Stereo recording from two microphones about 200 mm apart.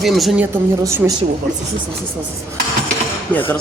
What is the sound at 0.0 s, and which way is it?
Speech, centre (ahead or behind).